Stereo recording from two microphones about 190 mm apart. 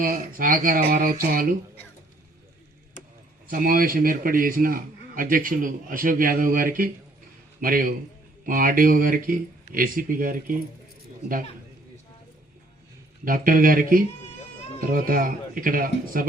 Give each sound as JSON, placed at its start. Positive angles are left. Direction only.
{"t": 0.1, "sound": "a man's voice", "side_deg": -50}
{"t": 3.4, "sound": "a man's voice", "side_deg": -50}
{"t": 13.2, "sound": "a man's voice", "side_deg": -50}